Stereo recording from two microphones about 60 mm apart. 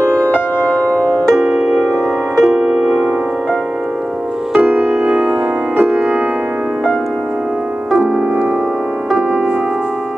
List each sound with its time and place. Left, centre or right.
0.8 s music: right
2.5 s music: right
4.6 s music: right
5.0 s music: right
7.9 s music: centre